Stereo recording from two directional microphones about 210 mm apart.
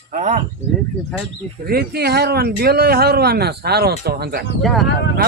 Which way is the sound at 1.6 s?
45° right (ahead or behind).